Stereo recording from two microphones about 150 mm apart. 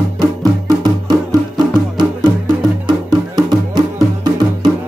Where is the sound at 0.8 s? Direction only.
30° right (ahead or behind).